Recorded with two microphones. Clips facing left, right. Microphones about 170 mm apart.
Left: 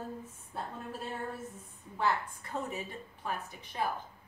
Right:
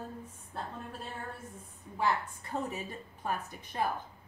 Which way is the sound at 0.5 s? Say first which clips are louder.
Even; 5° left (ahead or behind).